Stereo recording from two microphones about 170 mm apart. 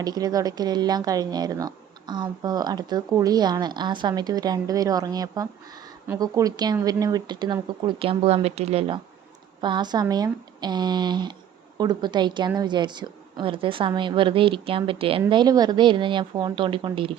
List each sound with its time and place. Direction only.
0.0 s speech: 20° right (ahead or behind)